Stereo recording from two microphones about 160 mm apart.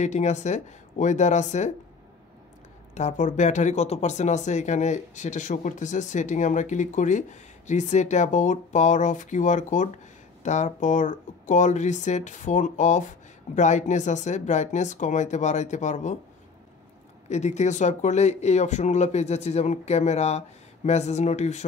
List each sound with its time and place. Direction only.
0.0 s speech: 45° left (ahead or behind)
2.9 s speech: 45° left (ahead or behind)
17.3 s speech: 45° left (ahead or behind)